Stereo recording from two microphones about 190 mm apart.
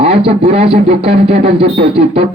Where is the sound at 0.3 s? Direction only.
35° right (ahead or behind).